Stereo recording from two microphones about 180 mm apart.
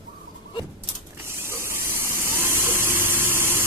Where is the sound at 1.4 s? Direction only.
15° right (ahead or behind).